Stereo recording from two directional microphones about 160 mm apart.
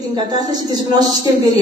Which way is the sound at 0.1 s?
25° right (ahead or behind).